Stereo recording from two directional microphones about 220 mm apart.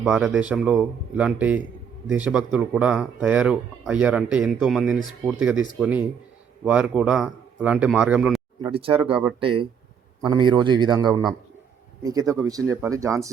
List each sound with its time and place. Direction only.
0.0 s speech: centre (ahead or behind)
8.6 s a man's voice: 25° right (ahead or behind)